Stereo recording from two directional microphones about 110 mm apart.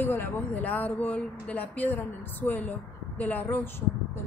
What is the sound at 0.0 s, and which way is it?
Speech, 15° left (ahead or behind).